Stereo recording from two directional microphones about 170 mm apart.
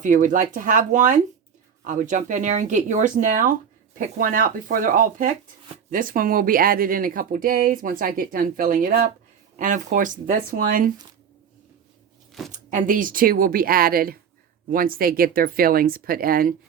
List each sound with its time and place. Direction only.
0.0 s speech: 50° right (ahead or behind)
12.5 s speech: 50° right (ahead or behind)